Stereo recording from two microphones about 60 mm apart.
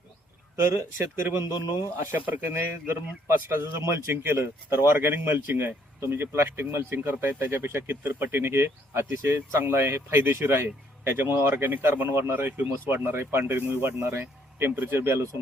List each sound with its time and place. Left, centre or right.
0.7 s speech: right
2.0 s speech: right
3.8 s speech: right